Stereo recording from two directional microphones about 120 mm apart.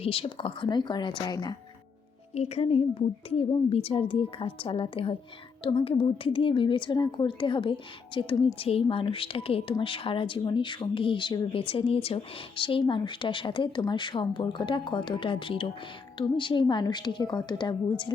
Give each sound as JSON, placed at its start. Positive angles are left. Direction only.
{"t": 0.0, "sound": "a woman's voice", "side_deg": 50}
{"t": 2.3, "sound": "a woman's voice", "side_deg": 65}